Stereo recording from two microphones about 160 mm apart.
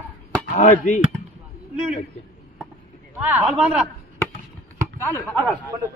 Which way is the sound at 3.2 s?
10° right (ahead or behind).